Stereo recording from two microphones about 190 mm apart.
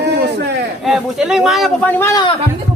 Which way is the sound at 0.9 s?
Centre (ahead or behind).